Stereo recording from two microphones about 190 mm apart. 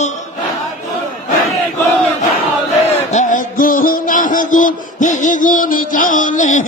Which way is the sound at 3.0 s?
40° left (ahead or behind).